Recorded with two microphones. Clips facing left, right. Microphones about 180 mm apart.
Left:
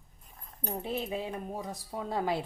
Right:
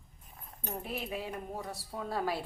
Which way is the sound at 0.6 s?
25° left (ahead or behind).